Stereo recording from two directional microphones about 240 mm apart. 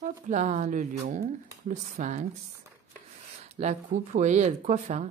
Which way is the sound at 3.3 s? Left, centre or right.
Right.